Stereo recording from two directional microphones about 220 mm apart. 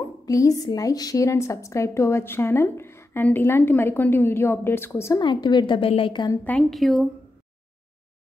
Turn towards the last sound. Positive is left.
turn(degrees=0)  # may be behind; listen again after turning